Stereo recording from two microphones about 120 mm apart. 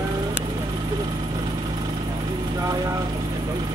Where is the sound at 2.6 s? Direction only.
25° right (ahead or behind).